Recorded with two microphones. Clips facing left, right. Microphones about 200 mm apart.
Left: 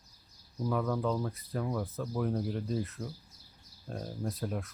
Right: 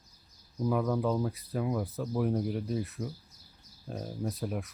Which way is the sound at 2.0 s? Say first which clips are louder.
Right 4 dB; 15° right (ahead or behind).